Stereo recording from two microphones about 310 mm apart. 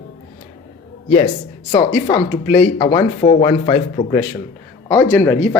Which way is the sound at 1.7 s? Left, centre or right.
Centre.